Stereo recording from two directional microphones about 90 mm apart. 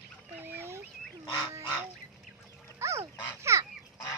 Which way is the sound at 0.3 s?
25° right (ahead or behind).